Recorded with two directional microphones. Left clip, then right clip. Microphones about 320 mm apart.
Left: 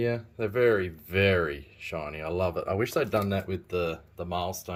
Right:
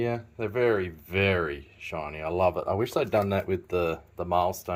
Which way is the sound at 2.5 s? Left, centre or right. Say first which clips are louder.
Right 2 dB; right.